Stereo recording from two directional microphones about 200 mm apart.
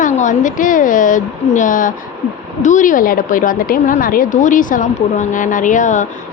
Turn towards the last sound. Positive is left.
turn(degrees=40)  # may be behind; listen again after turning